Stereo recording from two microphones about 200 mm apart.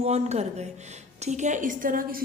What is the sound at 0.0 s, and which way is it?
A woman's voice, 30° right (ahead or behind).